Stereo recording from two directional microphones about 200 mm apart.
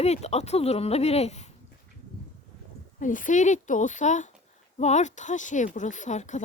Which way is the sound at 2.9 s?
40° left (ahead or behind).